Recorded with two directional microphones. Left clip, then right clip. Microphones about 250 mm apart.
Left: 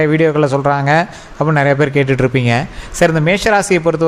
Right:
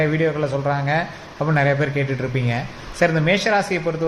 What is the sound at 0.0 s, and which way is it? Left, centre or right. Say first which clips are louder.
A man's voice: left 8 dB; left.